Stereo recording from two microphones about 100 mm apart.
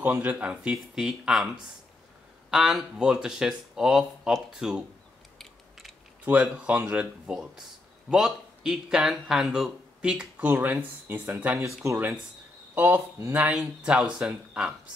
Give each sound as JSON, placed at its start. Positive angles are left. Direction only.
{"t": 0.0, "sound": "speech", "side_deg": -15}
{"t": 2.5, "sound": "speech", "side_deg": -5}
{"t": 5.4, "sound": "biting", "side_deg": 0}
{"t": 6.2, "sound": "speech", "side_deg": -15}
{"t": 10.5, "sound": "speech", "side_deg": -20}
{"t": 13.5, "sound": "speech", "side_deg": -10}